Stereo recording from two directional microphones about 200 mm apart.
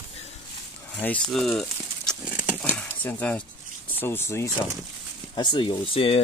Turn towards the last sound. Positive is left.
turn(degrees=30)  # may be behind; listen again after turning